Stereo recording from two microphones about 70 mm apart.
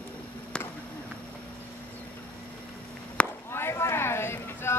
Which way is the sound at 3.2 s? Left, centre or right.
Centre.